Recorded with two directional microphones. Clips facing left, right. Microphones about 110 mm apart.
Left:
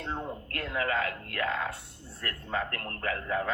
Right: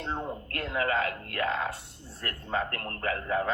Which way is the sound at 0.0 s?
20° right (ahead or behind).